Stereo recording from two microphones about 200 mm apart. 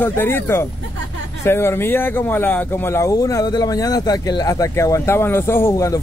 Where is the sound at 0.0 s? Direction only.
10° left (ahead or behind).